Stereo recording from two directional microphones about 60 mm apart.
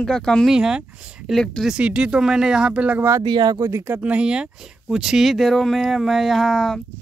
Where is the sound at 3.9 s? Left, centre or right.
Right.